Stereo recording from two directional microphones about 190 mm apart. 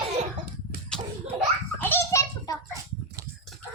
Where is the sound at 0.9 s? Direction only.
5° left (ahead or behind).